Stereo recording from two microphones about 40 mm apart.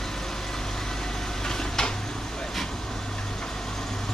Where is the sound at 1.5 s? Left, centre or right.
Centre.